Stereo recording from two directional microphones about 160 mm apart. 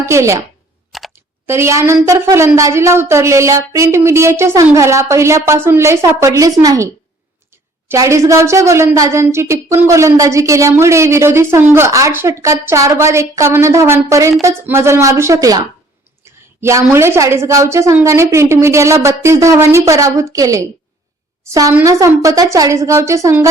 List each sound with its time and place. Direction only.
0.0 s a woman's voice: 20° right (ahead or behind)
0.9 s a sound: centre (ahead or behind)
1.5 s a woman's voice: 15° right (ahead or behind)
7.9 s a woman's voice: 20° right (ahead or behind)
21.8 s a woman's voice: 20° right (ahead or behind)